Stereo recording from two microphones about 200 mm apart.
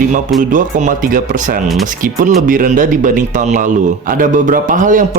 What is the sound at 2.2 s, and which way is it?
Speech, 40° right (ahead or behind).